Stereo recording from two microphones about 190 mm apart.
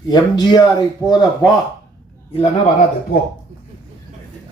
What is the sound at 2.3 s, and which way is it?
Speech, 35° left (ahead or behind).